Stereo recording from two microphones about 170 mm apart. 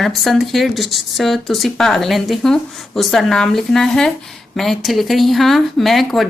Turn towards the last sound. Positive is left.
turn(degrees=0)  # may be behind; listen again after turning